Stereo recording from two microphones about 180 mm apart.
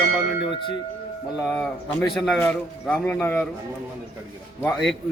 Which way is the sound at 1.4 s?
5° left (ahead or behind).